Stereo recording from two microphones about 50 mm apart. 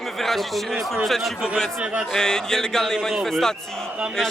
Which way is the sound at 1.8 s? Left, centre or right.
Right.